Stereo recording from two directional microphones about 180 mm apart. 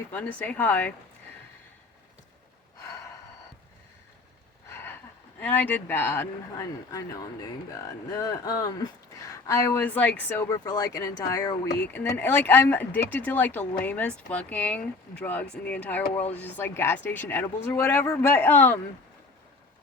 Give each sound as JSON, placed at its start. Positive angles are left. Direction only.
{"t": 0.1, "sound": "speech", "side_deg": 10}
{"t": 4.7, "sound": "a sound", "side_deg": 10}
{"t": 5.4, "sound": "speech", "side_deg": 10}